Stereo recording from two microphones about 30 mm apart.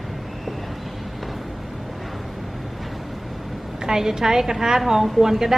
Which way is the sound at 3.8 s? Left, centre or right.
Centre.